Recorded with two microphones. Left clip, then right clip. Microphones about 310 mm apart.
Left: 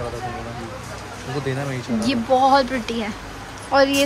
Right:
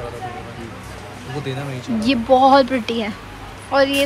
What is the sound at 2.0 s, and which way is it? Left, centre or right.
Speech, centre.